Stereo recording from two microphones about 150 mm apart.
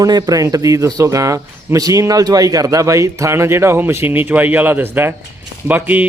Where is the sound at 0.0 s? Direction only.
25° right (ahead or behind).